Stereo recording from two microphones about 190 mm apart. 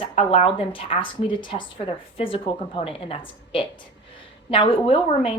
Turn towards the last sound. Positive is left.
turn(degrees=30)  # may be behind; listen again after turning